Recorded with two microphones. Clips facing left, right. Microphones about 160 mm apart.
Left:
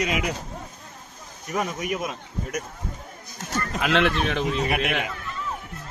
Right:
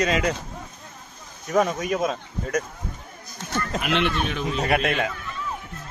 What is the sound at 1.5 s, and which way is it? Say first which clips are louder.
A man's voice: right 5 dB; 80° right.